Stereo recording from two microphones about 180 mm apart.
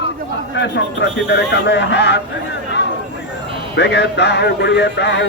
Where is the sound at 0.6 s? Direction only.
80° left.